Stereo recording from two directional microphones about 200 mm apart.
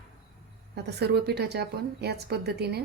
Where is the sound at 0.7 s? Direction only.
55° right (ahead or behind).